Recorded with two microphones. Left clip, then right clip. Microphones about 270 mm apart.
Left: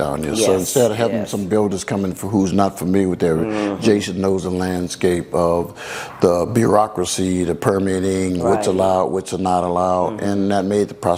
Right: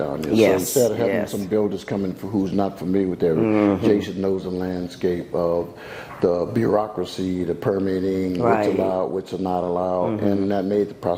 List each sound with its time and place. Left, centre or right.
0.3 s speech: right
0.7 s speech: left
3.4 s speech: right
3.8 s speech: left